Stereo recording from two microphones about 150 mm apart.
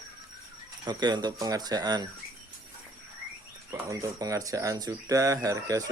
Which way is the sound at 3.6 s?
25° right (ahead or behind).